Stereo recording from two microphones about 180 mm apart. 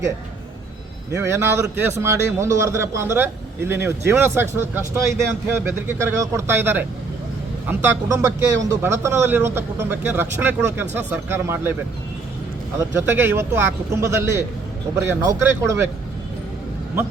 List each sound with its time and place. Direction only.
1.1 s a man's voice: 15° right (ahead or behind)
13.0 s a man's voice: 10° right (ahead or behind)